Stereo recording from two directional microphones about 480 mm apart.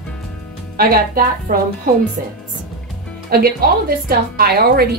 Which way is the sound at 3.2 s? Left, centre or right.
Centre.